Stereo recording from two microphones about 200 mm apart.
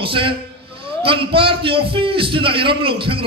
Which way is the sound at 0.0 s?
25° right (ahead or behind).